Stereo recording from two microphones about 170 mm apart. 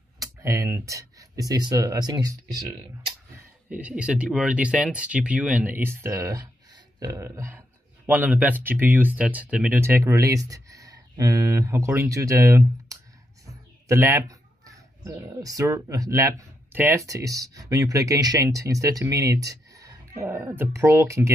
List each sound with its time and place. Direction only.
0.2 s speech: 20° right (ahead or behind)
3.3 s speech: 10° right (ahead or behind)
13.5 s a sound: 15° right (ahead or behind)
15.7 s speech: 15° right (ahead or behind)